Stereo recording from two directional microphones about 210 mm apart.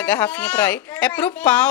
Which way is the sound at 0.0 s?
10° left (ahead or behind).